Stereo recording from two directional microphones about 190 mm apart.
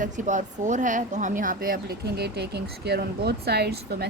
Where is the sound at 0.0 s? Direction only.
40° right (ahead or behind).